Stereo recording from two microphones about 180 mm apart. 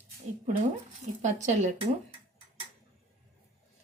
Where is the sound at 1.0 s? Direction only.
40° right (ahead or behind).